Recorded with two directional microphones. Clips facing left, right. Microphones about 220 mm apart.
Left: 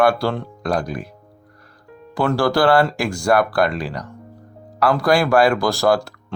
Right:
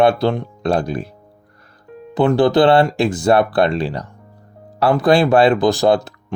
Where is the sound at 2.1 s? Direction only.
20° right (ahead or behind).